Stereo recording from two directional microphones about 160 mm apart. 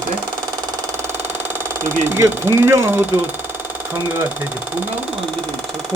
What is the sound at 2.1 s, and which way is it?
Speech, 15° right (ahead or behind).